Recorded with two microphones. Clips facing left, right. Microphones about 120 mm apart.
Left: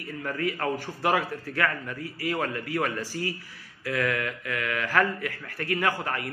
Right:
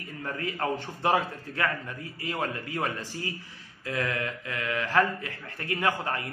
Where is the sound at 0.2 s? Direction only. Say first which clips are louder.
Left 2 dB; 25° right (ahead or behind).